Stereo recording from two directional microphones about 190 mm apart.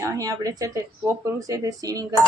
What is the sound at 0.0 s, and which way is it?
Speech, 15° right (ahead or behind).